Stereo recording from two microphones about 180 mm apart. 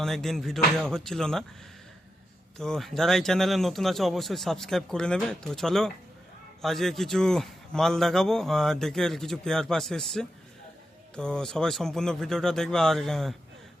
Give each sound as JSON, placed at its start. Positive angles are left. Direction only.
{"t": 0.0, "sound": "a man's voice", "side_deg": 0}
{"t": 2.6, "sound": "a man's voice", "side_deg": 5}